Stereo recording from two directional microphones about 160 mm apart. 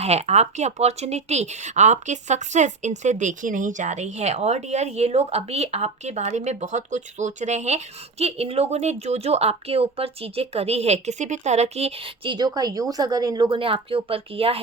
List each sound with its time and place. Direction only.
0.0 s speech: 40° right (ahead or behind)